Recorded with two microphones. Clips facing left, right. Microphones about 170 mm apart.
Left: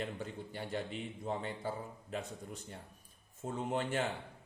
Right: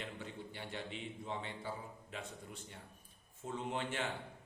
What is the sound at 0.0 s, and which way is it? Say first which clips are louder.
A man's voice: left 5 dB; 40° left (ahead or behind).